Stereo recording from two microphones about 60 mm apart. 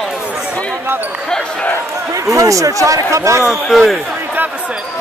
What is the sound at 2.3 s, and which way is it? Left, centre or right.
Speech, right.